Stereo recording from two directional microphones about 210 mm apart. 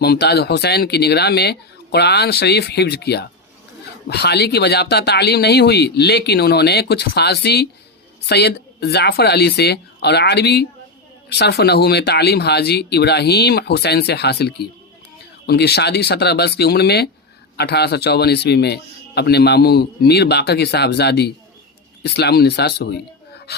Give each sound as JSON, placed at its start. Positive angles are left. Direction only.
{"t": 0.0, "sound": "a man's voice", "side_deg": 50}